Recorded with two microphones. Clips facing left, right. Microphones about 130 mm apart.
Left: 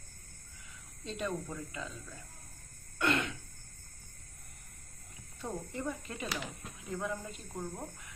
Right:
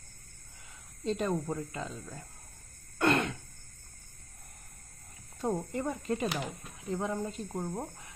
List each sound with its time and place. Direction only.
1.0 s speech: 40° right (ahead or behind)
3.0 s throat clearing: 40° right (ahead or behind)
5.4 s speech: 45° right (ahead or behind)
6.9 s speech: 30° right (ahead or behind)